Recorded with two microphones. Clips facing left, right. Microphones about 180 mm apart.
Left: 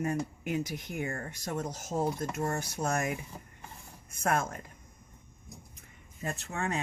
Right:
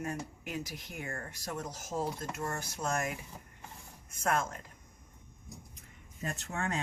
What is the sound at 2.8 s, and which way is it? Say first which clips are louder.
Speech: left 2 dB; 35° left (ahead or behind).